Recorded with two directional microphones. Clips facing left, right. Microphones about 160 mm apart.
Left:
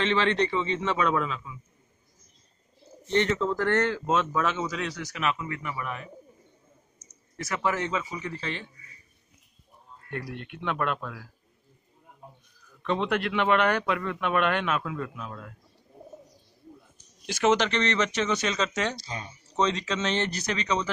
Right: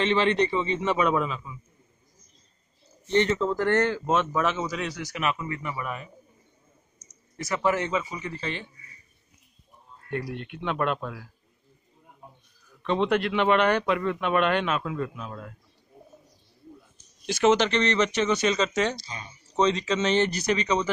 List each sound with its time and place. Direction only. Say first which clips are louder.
0.0 s a man's voice: right 2 dB; 15° right (ahead or behind)
3.1 s a man's voice: right 2 dB; 15° right (ahead or behind)
7.3 s speech: right 3 dB; centre (ahead or behind)
10.1 s a man's voice: right 4 dB; 5° right (ahead or behind)
12.8 s a man's voice: right 3 dB; centre (ahead or behind); by 15.5 s 15° right (ahead or behind)
17.3 s speech: right 2 dB; 5° left (ahead or behind)
18.9 s speech: left 3 dB; 50° left (ahead or behind)
19.5 s speech: right 3 dB; 5° right (ahead or behind)